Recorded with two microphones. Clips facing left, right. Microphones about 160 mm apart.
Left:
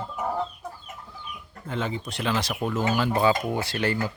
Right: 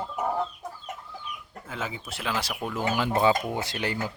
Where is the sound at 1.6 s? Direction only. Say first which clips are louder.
Left 5 dB; 5° right (ahead or behind).